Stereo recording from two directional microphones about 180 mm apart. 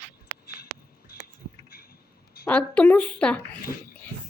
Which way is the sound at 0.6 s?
60° left (ahead or behind).